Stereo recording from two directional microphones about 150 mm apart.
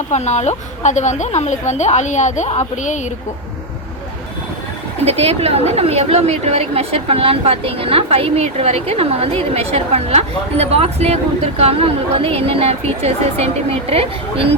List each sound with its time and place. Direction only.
0.1 s a woman's voice: 50° left (ahead or behind)
5.0 s a woman's voice: 45° right (ahead or behind)